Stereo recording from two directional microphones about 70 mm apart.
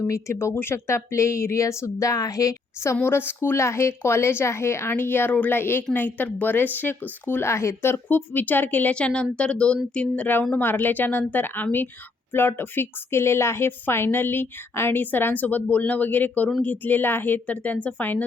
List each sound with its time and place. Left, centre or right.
0.1 s speech: left
7.5 s a woman's voice: left
9.0 s a woman's voice: centre
10.5 s a woman's voice: left